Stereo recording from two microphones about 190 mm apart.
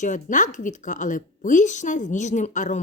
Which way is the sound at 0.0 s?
40° left (ahead or behind).